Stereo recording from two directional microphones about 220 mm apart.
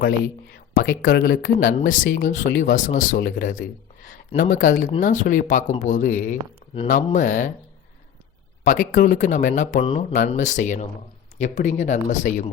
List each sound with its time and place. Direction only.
0.5 s speech: 40° left (ahead or behind)
8.6 s speech: 40° left (ahead or behind)